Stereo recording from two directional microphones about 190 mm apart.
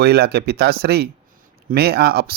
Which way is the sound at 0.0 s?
55° right (ahead or behind).